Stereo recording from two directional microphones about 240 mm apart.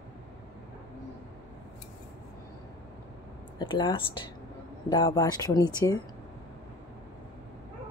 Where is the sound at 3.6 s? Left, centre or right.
Left.